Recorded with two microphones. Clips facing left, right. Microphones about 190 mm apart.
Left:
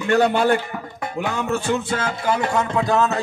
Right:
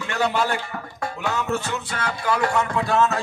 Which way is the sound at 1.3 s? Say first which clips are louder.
Left 6 dB; 25° left (ahead or behind).